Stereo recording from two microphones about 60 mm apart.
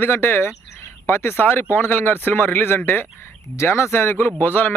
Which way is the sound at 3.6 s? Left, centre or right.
Left.